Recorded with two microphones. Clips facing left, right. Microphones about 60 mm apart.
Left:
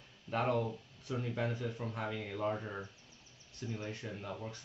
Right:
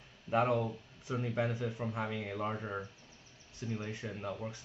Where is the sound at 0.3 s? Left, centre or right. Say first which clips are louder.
Right 3 dB; centre.